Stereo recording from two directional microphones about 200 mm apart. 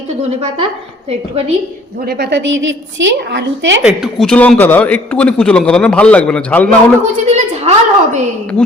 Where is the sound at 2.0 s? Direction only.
55° right (ahead or behind).